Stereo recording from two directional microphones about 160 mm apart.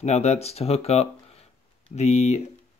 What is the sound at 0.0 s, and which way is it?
Speech, 45° left (ahead or behind).